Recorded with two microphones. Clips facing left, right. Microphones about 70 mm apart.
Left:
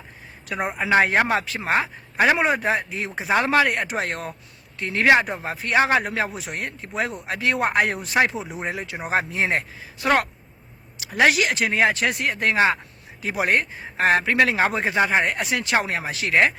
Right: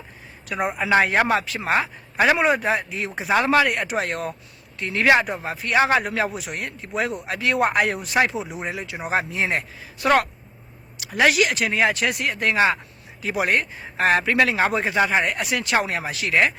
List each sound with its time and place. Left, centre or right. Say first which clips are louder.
0.4 s speech: right 1 dB; left
8.4 s speech: right 2 dB; centre
8.6 s speech: even; left